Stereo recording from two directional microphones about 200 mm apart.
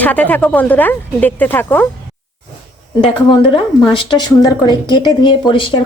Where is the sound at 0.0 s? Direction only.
10° left (ahead or behind).